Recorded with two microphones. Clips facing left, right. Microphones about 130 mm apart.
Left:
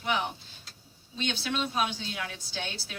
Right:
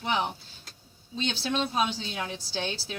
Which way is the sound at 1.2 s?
35° right (ahead or behind).